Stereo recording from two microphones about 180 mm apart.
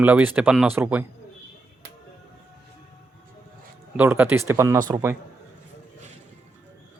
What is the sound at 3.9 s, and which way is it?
Speech, 10° right (ahead or behind).